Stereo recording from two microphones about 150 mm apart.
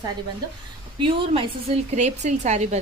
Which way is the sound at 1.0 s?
35° right (ahead or behind).